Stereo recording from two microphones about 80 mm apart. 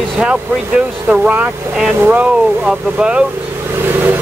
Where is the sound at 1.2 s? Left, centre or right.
Right.